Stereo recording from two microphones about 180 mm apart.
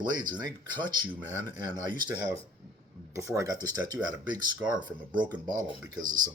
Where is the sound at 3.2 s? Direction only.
15° right (ahead or behind).